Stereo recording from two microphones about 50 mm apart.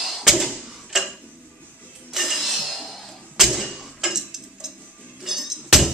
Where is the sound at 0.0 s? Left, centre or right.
Centre.